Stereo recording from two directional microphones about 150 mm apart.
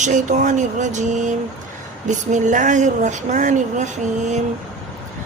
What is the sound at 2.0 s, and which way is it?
Speech, 55° right (ahead or behind).